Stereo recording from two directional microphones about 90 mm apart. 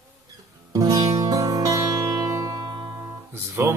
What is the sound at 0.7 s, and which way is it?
Music, 40° right (ahead or behind).